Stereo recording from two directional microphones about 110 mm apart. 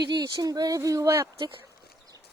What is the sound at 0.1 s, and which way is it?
Speech, 40° right (ahead or behind).